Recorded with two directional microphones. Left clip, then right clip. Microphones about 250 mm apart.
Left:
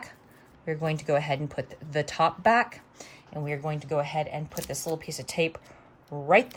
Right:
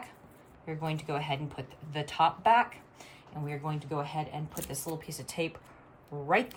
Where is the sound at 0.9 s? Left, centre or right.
Left.